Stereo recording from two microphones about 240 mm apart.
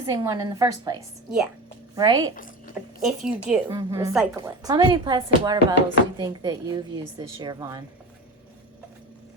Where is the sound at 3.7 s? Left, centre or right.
Centre.